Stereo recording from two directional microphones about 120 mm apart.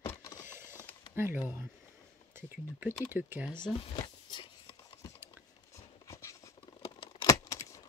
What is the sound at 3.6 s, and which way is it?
Speech, 50° left (ahead or behind).